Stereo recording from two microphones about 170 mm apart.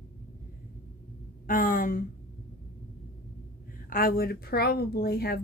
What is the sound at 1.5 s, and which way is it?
Speech, 55° left (ahead or behind).